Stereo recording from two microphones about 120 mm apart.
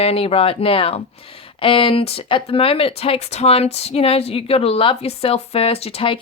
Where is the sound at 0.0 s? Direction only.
55° left (ahead or behind).